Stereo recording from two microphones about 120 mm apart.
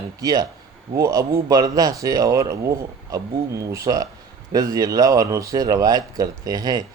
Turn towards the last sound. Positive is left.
turn(degrees=-35)  # may be behind; listen again after turning